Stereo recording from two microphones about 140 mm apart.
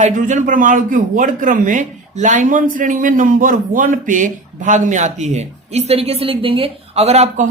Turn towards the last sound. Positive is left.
turn(degrees=-50)  # may be behind; listen again after turning